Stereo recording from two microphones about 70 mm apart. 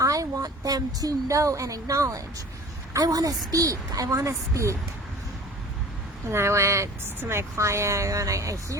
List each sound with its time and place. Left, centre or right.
0.0 s speech: right
1.4 s a woman's voice: right
6.3 s a woman's voice: right